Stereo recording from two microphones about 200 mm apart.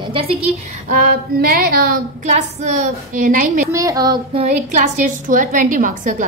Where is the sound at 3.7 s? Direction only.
15° right (ahead or behind); by 6.2 s 40° right (ahead or behind).